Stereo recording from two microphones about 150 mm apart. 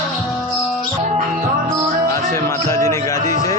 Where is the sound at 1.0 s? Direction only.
55° right (ahead or behind).